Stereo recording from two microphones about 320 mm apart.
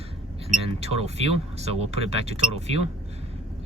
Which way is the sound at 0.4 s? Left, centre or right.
Centre.